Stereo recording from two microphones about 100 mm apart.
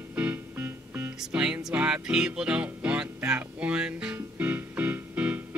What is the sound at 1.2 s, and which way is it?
Music, 10° right (ahead or behind).